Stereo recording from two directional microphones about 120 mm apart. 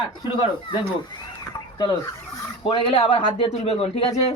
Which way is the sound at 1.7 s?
45° left (ahead or behind).